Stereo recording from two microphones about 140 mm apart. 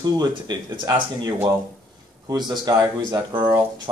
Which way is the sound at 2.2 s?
30° right (ahead or behind).